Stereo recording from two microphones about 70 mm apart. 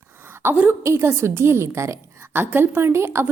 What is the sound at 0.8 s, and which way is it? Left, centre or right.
A woman's voice, right.